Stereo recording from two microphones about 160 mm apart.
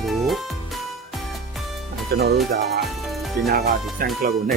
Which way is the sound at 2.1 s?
75° right (ahead or behind).